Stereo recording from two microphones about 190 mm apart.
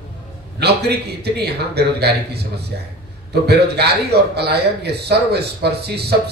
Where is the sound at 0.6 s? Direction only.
60° right (ahead or behind).